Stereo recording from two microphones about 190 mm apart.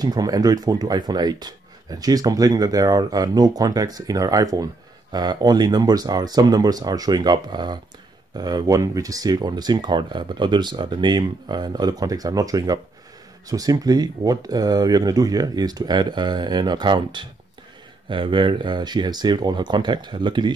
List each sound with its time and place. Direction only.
0.0 s speech: 20° right (ahead or behind)